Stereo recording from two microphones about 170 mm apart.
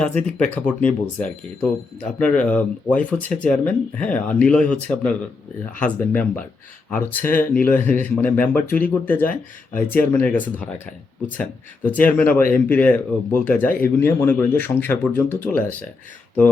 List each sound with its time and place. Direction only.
0.0 s speech: 5° left (ahead or behind)